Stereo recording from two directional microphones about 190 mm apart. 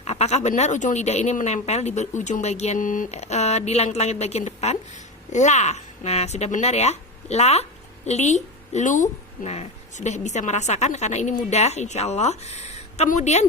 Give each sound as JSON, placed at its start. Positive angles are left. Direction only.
{"t": 0.0, "sound": "speech", "side_deg": 35}